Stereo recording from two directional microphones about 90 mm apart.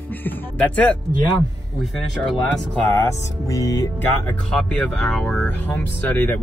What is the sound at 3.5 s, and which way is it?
Music, 40° left (ahead or behind).